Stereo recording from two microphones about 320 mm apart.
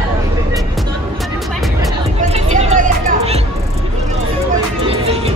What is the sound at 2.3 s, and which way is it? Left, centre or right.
Music, right.